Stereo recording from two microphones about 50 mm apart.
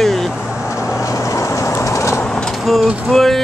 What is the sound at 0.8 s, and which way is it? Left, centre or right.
Vehicle, left.